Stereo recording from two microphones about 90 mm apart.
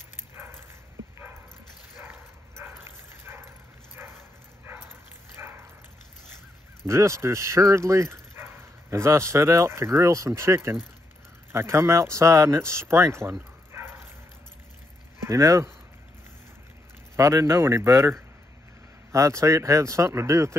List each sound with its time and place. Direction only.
2.0 s bow-wow: 25° right (ahead or behind)
4.0 s dog: 20° right (ahead or behind)
5.4 s bow-wow: 25° right (ahead or behind)
6.9 s speech: 30° right (ahead or behind)
15.2 s speech: 35° right (ahead or behind)
17.2 s speech: 35° right (ahead or behind)